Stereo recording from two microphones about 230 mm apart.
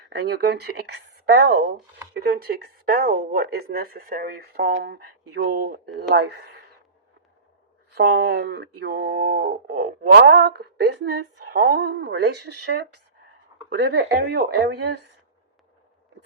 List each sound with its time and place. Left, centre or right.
0.1 s speech: right
7.9 s speech: right